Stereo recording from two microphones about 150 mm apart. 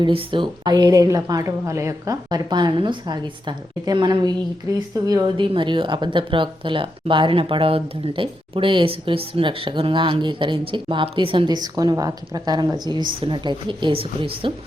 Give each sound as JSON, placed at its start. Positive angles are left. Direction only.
{"t": 0.0, "sound": "a woman's voice", "side_deg": -35}